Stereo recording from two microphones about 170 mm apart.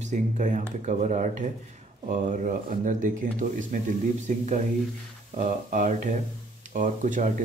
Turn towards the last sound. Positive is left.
turn(degrees=-50)  # may be behind; listen again after turning